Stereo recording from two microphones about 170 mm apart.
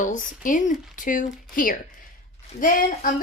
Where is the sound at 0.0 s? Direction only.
50° left (ahead or behind).